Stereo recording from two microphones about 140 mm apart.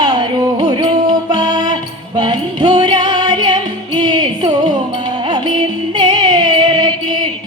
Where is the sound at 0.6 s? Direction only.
30° right (ahead or behind).